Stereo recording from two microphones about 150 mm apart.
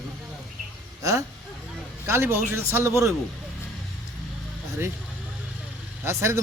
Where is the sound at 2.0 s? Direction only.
15° right (ahead or behind).